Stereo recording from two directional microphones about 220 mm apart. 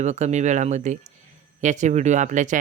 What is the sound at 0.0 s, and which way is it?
Speech, 30° right (ahead or behind).